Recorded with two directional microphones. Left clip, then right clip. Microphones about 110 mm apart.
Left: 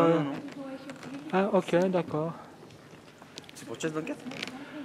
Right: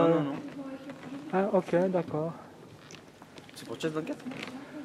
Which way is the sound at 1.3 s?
35° left (ahead or behind).